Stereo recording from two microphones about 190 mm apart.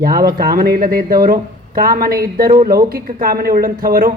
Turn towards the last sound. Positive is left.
turn(degrees=-50)  # may be behind; listen again after turning